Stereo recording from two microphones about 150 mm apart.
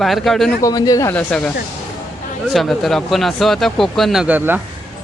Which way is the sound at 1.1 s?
5° left (ahead or behind).